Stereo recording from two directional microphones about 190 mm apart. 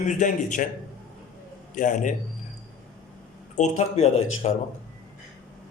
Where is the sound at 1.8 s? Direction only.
40° left (ahead or behind).